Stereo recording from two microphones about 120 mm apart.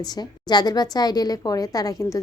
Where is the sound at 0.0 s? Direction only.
35° left (ahead or behind).